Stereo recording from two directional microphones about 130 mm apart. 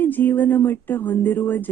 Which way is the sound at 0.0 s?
15° left (ahead or behind).